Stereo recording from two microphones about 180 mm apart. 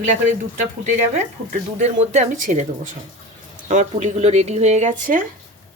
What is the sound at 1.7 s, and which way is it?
Speech, 40° right (ahead or behind).